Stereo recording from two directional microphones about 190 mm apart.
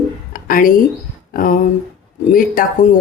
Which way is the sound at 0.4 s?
50° left (ahead or behind).